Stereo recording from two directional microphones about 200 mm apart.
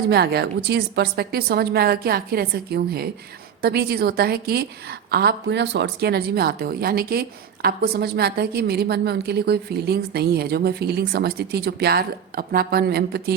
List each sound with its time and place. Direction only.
0.1 s a woman's voice: 55° right (ahead or behind)